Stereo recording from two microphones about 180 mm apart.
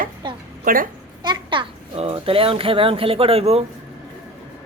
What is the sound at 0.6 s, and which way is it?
Speech, 50° right (ahead or behind).